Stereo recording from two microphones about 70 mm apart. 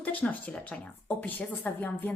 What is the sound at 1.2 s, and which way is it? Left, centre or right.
Speech, left.